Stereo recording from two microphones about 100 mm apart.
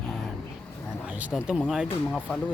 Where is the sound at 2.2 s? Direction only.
15° left (ahead or behind).